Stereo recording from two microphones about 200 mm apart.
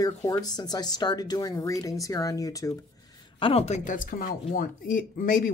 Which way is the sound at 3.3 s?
25° left (ahead or behind).